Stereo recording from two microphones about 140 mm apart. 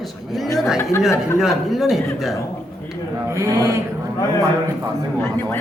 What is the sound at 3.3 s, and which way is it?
Speech, 20° right (ahead or behind).